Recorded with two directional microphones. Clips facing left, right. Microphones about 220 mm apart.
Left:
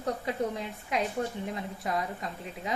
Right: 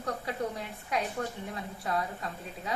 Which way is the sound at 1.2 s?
20° left (ahead or behind).